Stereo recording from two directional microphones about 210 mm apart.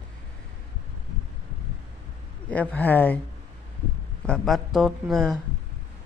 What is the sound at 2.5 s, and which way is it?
Speech, 5° left (ahead or behind).